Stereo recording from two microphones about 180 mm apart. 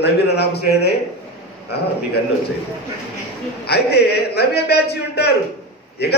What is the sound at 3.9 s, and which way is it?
A man's voice, 65° left (ahead or behind).